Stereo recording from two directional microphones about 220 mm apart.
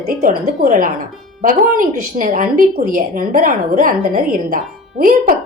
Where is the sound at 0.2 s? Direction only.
35° right (ahead or behind).